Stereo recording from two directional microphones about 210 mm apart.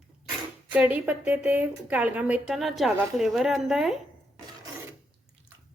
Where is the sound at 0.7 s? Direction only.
5° right (ahead or behind).